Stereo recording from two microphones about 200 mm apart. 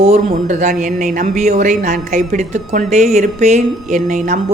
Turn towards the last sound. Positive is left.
turn(degrees=-40)  # may be behind; listen again after turning